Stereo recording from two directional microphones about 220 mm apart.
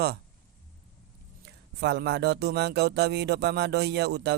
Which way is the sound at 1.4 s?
50° right (ahead or behind).